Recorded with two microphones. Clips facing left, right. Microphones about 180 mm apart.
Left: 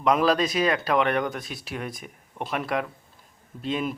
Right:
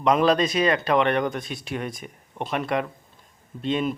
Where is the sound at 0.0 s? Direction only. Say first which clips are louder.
Right 2 dB; centre (ahead or behind).